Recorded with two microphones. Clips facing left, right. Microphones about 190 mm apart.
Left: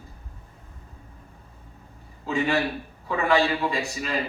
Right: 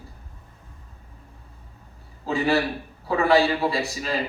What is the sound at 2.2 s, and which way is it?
A man's voice, 35° right (ahead or behind).